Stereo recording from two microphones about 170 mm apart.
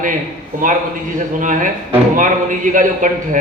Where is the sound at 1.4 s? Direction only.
50° right (ahead or behind).